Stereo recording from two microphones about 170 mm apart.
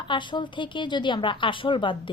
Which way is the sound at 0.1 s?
30° left (ahead or behind).